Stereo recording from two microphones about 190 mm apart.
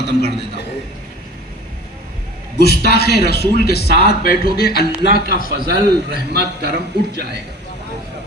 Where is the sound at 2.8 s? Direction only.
60° left (ahead or behind).